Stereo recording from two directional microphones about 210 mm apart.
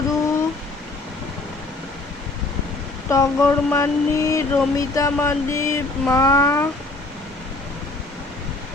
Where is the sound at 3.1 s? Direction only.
15° left (ahead or behind).